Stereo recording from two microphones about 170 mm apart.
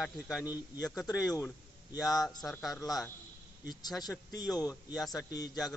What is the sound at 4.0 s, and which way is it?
Speech, 20° left (ahead or behind).